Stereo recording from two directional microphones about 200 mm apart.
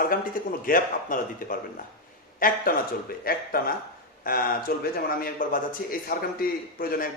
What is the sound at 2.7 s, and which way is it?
A man's voice, 45° left (ahead or behind).